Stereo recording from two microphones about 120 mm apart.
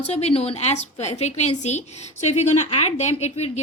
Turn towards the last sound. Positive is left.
turn(degrees=70)  # may be behind; listen again after turning